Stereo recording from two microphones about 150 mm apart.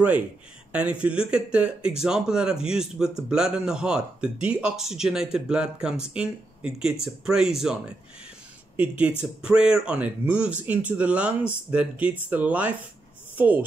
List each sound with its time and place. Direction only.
0.7 s speech: 10° right (ahead or behind)
8.7 s speech: 10° right (ahead or behind)